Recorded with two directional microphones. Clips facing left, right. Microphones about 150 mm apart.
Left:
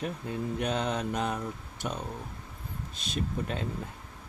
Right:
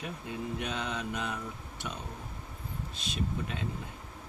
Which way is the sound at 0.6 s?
40° left (ahead or behind).